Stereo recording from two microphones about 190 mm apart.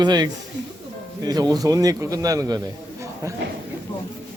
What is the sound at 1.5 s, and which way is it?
Speech, 20° right (ahead or behind).